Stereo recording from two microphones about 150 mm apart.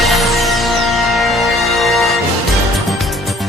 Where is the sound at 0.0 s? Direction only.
Centre (ahead or behind).